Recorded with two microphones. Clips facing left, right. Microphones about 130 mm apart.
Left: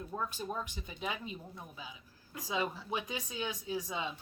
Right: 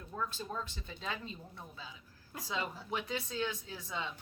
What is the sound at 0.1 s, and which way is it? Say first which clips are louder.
Speech: even; 15° left (ahead or behind).